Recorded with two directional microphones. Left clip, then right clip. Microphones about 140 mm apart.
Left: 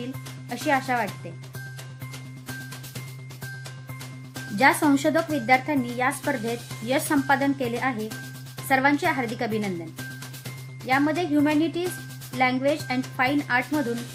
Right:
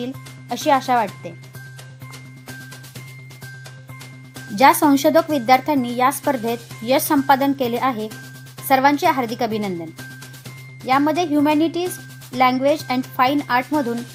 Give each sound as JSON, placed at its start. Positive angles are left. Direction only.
{"t": 0.7, "sound": "speech", "side_deg": -65}
{"t": 4.5, "sound": "speech", "side_deg": -60}
{"t": 10.8, "sound": "speech", "side_deg": -60}